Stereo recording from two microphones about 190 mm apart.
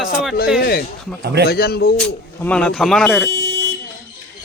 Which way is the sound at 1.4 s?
55° left (ahead or behind).